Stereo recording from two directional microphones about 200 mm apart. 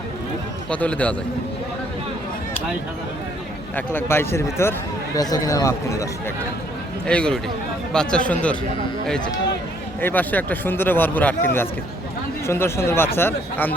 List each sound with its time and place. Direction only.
0.7 s speech: 5° left (ahead or behind)
3.8 s speech: 10° left (ahead or behind)
7.1 s speech: 5° left (ahead or behind)
10.0 s speech: 10° left (ahead or behind)